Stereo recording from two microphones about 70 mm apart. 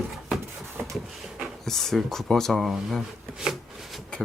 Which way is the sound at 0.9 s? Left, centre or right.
Centre.